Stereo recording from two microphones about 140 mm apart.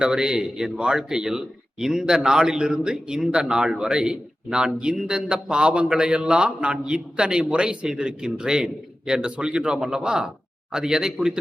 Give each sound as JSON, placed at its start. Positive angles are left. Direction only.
{"t": 0.0, "sound": "speech", "side_deg": -5}